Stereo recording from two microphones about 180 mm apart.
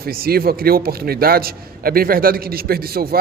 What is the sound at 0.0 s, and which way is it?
A man's voice, 55° right (ahead or behind).